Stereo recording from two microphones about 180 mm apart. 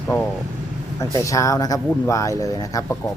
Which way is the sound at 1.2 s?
20° left (ahead or behind).